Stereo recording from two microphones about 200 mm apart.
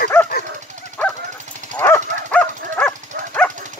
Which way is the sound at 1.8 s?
10° left (ahead or behind).